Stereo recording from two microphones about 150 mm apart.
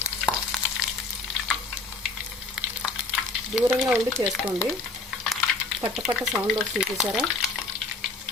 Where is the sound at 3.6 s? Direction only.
5° right (ahead or behind).